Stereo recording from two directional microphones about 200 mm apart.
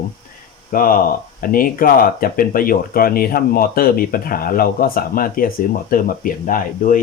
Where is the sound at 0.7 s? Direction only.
45° left (ahead or behind).